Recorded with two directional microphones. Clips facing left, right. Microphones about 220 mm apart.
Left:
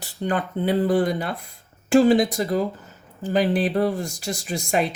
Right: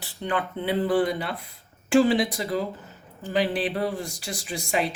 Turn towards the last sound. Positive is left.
turn(degrees=45)  # may be behind; listen again after turning